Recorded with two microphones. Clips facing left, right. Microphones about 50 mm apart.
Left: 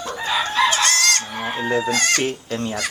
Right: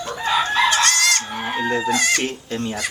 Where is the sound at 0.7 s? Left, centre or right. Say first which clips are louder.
Right 1 dB; centre.